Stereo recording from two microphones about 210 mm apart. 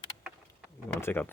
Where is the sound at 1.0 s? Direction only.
10° left (ahead or behind).